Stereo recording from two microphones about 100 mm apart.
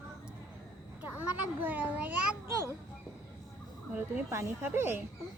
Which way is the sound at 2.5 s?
30° right (ahead or behind).